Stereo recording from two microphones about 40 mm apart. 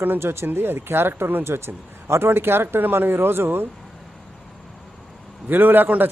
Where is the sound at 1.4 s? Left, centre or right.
Right.